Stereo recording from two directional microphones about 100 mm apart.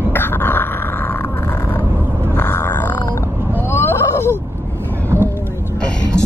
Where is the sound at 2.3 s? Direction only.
20° left (ahead or behind).